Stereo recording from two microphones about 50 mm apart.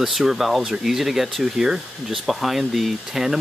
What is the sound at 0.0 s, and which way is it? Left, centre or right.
Speech, centre.